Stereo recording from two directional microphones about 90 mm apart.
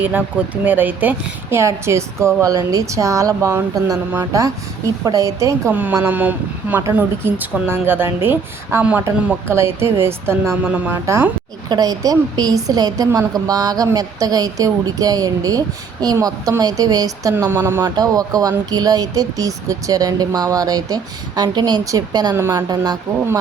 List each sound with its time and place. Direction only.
0.0 s a woman's voice: 20° right (ahead or behind)
1.5 s a woman's voice: 30° right (ahead or behind)
6.0 s a woman's voice: 20° right (ahead or behind)
9.5 s a woman's voice: 30° right (ahead or behind)
10.6 s speech: 15° right (ahead or behind)
10.9 s a woman's voice: 35° right (ahead or behind)
11.7 s speech: 45° right (ahead or behind)
17.5 s a woman's voice: 25° right (ahead or behind)
17.8 s speech: 45° right (ahead or behind)